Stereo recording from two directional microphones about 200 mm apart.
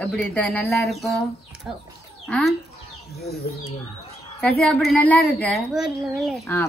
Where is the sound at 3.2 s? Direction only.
50° left (ahead or behind).